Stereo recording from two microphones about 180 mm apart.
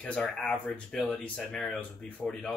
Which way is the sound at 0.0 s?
5° left (ahead or behind).